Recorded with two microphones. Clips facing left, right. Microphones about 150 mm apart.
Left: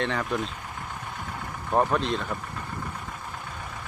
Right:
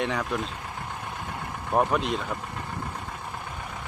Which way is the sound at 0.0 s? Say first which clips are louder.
Even; 10° right (ahead or behind).